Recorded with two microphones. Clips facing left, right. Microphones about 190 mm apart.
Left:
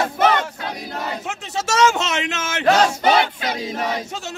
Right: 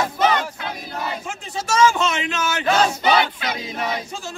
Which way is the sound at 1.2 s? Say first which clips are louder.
Left 2 dB; 75° left (ahead or behind).